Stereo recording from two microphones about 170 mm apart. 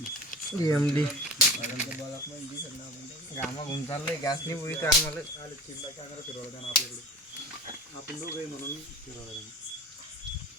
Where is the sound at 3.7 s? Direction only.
20° left (ahead or behind).